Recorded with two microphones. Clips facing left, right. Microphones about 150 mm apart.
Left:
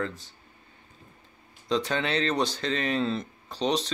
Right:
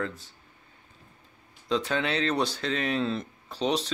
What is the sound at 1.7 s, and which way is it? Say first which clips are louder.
Speech: left 1 dB; 5° right (ahead or behind).